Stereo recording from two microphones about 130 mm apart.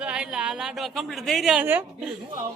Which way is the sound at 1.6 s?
15° right (ahead or behind).